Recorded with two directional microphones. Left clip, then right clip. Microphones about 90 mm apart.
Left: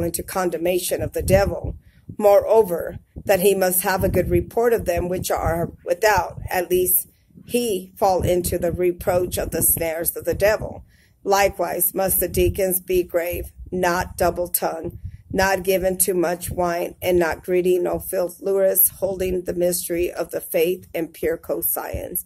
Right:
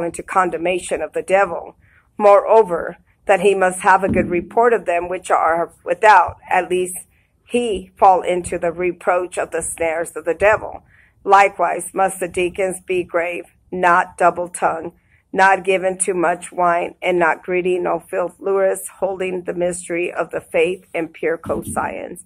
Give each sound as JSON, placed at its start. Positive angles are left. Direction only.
{"t": 0.0, "sound": "speech", "side_deg": 25}
{"t": 5.5, "sound": "speech", "side_deg": 15}
{"t": 6.2, "sound": "speech", "side_deg": 25}
{"t": 8.1, "sound": "speech", "side_deg": 25}